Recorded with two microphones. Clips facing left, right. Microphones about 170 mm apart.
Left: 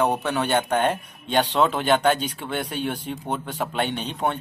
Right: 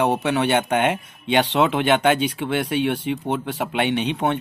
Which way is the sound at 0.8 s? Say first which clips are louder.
Right 2 dB; 70° right (ahead or behind).